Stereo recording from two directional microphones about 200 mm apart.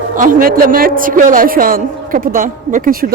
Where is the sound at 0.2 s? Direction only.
45° right (ahead or behind).